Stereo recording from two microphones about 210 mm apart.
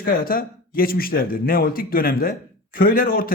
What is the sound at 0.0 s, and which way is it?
A man's voice, 45° left (ahead or behind).